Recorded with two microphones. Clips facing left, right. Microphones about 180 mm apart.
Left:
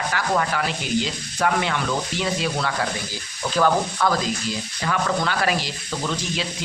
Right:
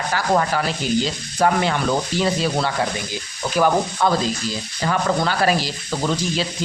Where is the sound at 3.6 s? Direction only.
20° right (ahead or behind).